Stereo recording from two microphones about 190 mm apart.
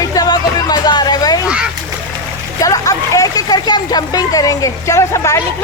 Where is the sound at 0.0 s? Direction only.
20° left (ahead or behind).